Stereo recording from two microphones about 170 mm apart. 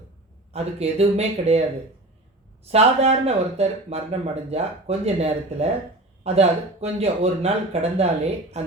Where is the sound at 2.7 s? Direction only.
35° right (ahead or behind).